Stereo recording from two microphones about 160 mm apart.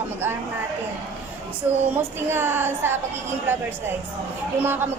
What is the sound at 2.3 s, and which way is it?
Speech, 15° right (ahead or behind).